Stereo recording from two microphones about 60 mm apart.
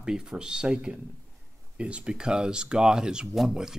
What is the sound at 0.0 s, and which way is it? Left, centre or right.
Speech, centre.